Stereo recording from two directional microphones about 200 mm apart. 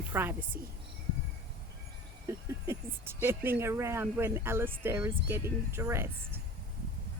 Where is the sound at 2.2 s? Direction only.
15° right (ahead or behind).